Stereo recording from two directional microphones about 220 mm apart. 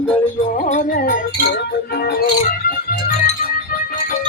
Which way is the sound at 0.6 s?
35° left (ahead or behind).